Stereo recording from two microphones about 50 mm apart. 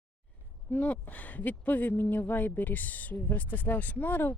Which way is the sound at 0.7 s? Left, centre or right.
Left.